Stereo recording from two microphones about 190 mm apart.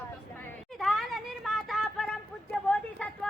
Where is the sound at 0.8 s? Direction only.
Centre (ahead or behind).